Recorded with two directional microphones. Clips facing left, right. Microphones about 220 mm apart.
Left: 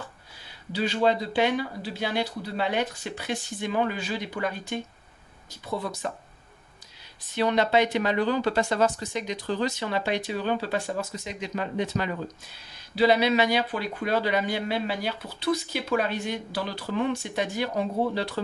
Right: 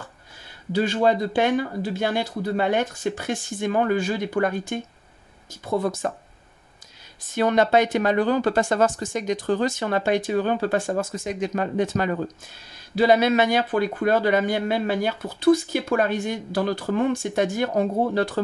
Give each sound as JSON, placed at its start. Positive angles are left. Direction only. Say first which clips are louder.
{"t": 0.7, "sound": "speech", "louder": "right 4 dB", "side_deg": -50}
{"t": 7.2, "sound": "speech", "louder": "right 4 dB", "side_deg": -50}